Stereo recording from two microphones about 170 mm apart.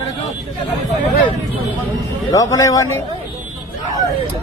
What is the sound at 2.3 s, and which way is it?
Speech, 20° left (ahead or behind).